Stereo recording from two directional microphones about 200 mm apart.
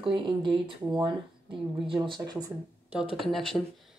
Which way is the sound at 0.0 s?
25° right (ahead or behind).